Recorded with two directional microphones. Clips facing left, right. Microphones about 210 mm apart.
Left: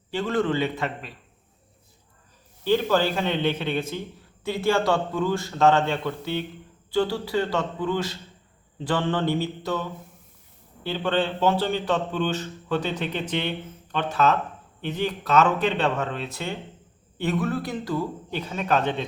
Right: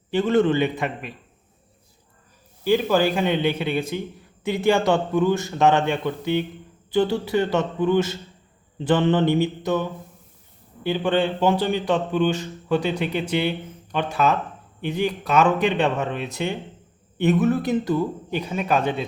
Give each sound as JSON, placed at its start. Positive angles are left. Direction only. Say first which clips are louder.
{"t": 0.1, "sound": "speech", "louder": "right 5 dB", "side_deg": -20}
{"t": 2.6, "sound": "speech", "louder": "right 2 dB", "side_deg": -10}
{"t": 10.8, "sound": "speech", "louder": "right 4 dB", "side_deg": -15}